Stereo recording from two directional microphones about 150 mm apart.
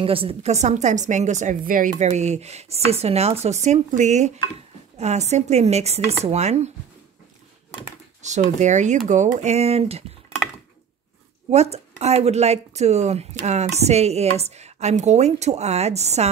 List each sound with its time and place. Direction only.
0.0 s speech: 40° right (ahead or behind)
8.2 s speech: 50° right (ahead or behind)
11.5 s speech: 45° right (ahead or behind)